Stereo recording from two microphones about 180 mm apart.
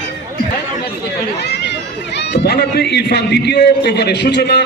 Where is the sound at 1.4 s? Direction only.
70° left (ahead or behind).